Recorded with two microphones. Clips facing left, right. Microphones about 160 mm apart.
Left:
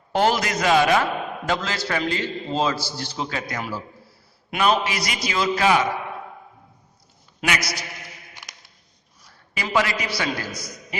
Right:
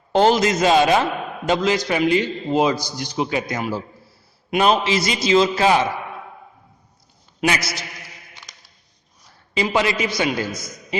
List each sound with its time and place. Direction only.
0.1 s a man's voice: 20° right (ahead or behind)
7.4 s a man's voice: 25° right (ahead or behind)
9.6 s a man's voice: 20° right (ahead or behind)